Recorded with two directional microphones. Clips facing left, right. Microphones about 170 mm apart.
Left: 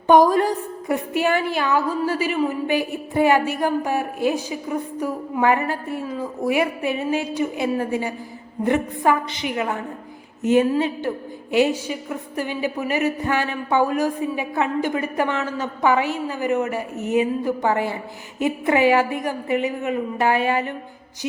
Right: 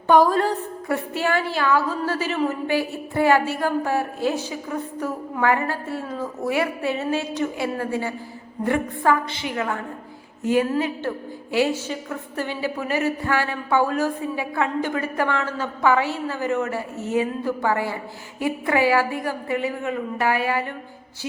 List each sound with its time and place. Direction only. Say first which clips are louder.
0.1 s a woman's voice: left 2 dB; 15° left (ahead or behind)